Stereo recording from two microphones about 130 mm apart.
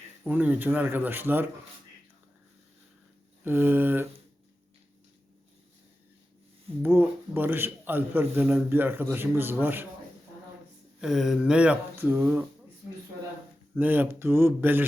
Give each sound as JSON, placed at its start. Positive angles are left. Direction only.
{"t": 0.3, "sound": "a man's voice", "side_deg": -15}
{"t": 3.4, "sound": "a man's voice", "side_deg": -15}
{"t": 6.8, "sound": "a man's voice", "side_deg": -15}
{"t": 11.0, "sound": "a man's voice", "side_deg": -5}
{"t": 13.7, "sound": "a man's voice", "side_deg": -15}